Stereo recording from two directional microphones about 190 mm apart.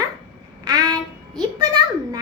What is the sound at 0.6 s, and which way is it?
Child singing, 20° right (ahead or behind).